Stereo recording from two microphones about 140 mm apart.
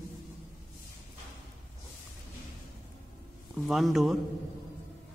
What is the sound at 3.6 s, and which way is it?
Speech, centre (ahead or behind).